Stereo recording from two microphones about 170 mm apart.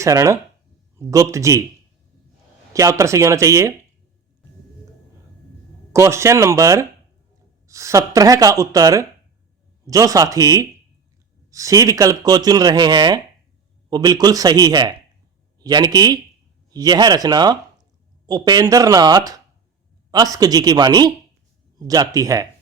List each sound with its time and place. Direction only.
0.0 s speech: 20° right (ahead or behind)
2.7 s speech: 20° right (ahead or behind)
5.9 s speech: 15° right (ahead or behind)